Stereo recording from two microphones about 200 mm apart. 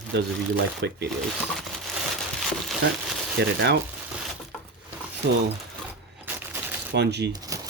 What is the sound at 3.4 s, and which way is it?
Speech, 60° right (ahead or behind).